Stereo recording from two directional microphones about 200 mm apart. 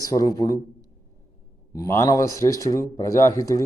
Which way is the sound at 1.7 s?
15° left (ahead or behind).